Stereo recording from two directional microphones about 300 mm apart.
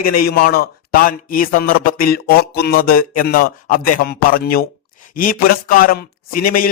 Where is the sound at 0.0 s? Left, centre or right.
Left.